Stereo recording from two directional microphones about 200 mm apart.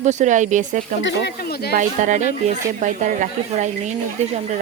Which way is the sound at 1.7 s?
40° right (ahead or behind).